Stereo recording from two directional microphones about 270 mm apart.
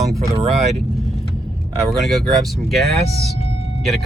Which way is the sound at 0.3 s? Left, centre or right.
Right.